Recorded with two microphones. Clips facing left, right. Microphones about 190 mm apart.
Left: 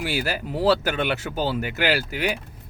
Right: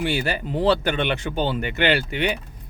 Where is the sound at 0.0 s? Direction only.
5° left (ahead or behind).